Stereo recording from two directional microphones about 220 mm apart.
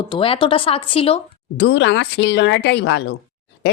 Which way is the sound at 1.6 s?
55° left (ahead or behind).